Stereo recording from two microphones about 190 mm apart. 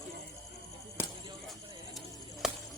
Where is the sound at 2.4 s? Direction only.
5° right (ahead or behind).